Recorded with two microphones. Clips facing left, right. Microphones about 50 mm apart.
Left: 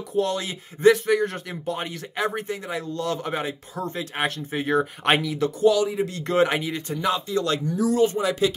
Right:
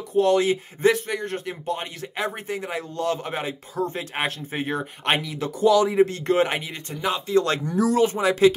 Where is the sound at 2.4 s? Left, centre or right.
Right.